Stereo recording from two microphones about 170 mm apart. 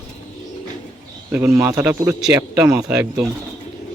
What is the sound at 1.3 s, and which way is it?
Speech, 10° right (ahead or behind).